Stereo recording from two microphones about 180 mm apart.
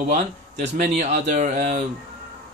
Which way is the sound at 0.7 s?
45° right (ahead or behind).